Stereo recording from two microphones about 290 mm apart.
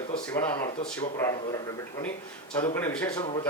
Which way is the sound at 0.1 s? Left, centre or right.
Centre.